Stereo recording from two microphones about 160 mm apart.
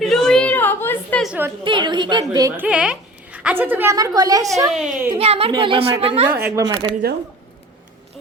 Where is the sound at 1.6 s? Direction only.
30° right (ahead or behind).